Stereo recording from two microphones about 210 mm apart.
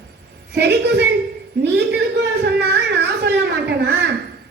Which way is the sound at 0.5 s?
55° right (ahead or behind).